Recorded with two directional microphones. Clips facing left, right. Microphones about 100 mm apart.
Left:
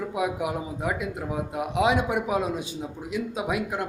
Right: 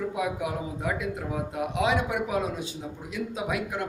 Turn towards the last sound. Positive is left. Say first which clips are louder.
# left 2 dB
turn(degrees=20)  # may be behind; listen again after turning